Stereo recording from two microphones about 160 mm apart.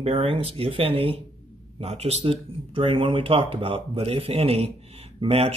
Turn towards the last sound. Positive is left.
turn(degrees=-40)  # may be behind; listen again after turning